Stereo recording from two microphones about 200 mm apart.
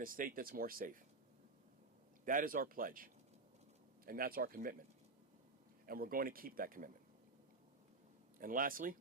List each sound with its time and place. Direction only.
0.0 s speech: 45° right (ahead or behind)
2.2 s speech: 45° right (ahead or behind)
5.8 s speech: 45° right (ahead or behind)
8.4 s speech: 45° right (ahead or behind)